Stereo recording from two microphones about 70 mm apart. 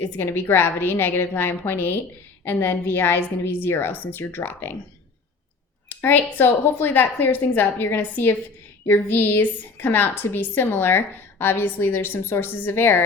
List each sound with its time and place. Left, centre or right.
0.0 s a woman's voice: left
5.9 s a woman's voice: left